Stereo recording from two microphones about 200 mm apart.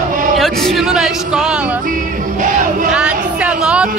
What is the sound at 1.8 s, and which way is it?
Music, 45° right (ahead or behind).